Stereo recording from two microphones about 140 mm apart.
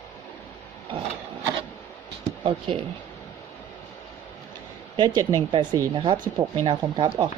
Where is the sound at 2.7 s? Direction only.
40° right (ahead or behind).